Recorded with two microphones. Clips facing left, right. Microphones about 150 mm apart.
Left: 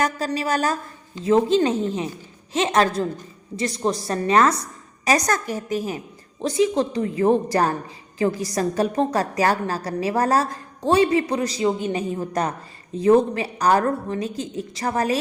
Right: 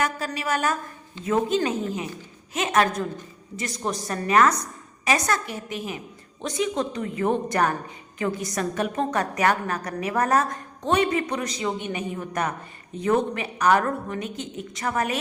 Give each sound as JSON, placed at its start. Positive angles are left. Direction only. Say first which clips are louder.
{"t": 0.0, "sound": "a woman's voice", "louder": "left 4 dB", "side_deg": 35}